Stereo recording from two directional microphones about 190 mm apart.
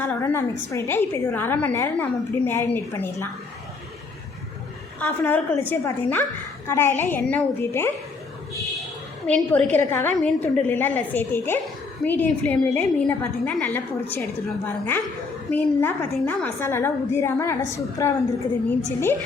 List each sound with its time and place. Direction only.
0.0 s a woman's voice: 10° left (ahead or behind)
4.9 s a woman's voice: 10° left (ahead or behind)
9.2 s a woman's voice: 5° left (ahead or behind)